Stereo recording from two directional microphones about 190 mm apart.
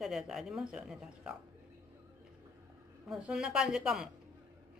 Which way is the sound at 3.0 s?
Centre (ahead or behind).